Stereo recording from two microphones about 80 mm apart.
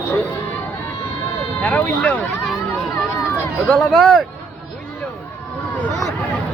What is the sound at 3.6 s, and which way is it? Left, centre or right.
Speech, centre.